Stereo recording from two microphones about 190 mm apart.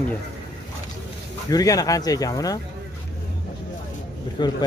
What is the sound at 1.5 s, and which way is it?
Speech, 20° left (ahead or behind).